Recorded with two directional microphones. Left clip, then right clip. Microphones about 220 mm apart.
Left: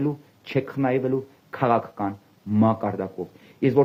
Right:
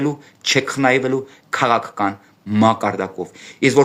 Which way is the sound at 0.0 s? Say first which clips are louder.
Right 7 dB; 20° right (ahead or behind).